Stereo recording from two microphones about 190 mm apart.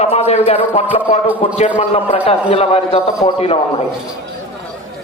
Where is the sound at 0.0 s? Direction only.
35° left (ahead or behind).